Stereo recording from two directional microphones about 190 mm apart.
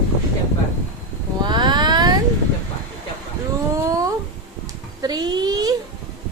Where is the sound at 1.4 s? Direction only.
25° right (ahead or behind).